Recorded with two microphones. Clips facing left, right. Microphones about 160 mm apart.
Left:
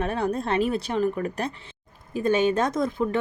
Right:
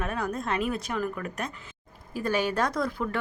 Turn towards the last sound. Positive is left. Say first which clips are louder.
# left 4 dB
turn(degrees=20)  # may be behind; listen again after turning